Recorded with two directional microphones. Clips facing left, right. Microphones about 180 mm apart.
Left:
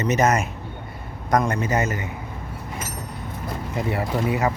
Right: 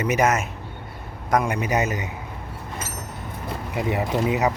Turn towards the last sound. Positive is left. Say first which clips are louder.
# right 1 dB
turn(degrees=-20)  # may be behind; listen again after turning